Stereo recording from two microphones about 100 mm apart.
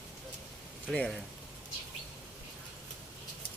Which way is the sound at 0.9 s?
5° left (ahead or behind).